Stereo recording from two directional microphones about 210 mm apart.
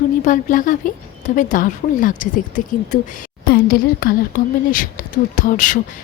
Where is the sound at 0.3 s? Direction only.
40° left (ahead or behind).